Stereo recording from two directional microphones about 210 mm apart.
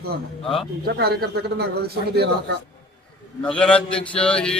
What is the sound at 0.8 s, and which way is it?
Speech, 50° right (ahead or behind).